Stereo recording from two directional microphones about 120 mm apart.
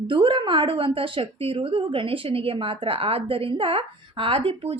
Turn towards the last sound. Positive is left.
turn(degrees=-55)  # may be behind; listen again after turning